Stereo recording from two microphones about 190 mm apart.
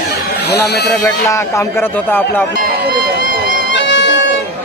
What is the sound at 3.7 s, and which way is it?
Music, 70° left (ahead or behind).